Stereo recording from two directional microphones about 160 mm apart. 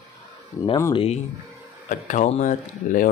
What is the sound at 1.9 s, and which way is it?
Speech, 50° left (ahead or behind).